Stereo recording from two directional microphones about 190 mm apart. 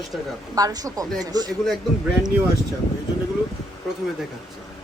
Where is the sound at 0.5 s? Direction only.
20° right (ahead or behind).